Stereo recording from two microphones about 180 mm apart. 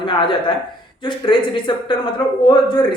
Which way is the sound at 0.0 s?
25° left (ahead or behind).